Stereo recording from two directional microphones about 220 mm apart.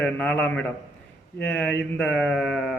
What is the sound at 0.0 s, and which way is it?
Speech, 5° left (ahead or behind).